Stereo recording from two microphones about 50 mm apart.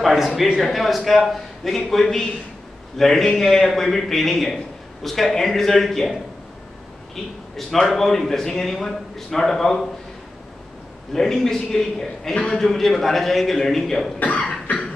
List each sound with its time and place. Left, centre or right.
0.0 s a man's voice: centre
7.5 s a man's voice: centre
11.1 s a man's voice: centre
14.2 s cough: left